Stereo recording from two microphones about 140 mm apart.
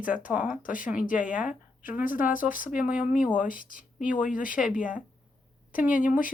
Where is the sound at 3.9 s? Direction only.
10° right (ahead or behind).